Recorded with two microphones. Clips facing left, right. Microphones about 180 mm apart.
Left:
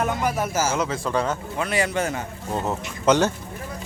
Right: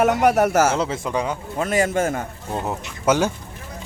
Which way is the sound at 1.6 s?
45° right (ahead or behind).